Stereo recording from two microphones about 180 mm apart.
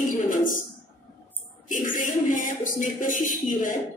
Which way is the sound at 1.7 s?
45° left (ahead or behind).